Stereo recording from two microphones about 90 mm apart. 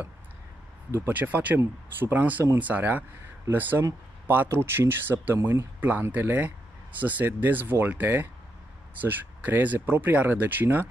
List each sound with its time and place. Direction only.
0.9 s speech: 20° right (ahead or behind)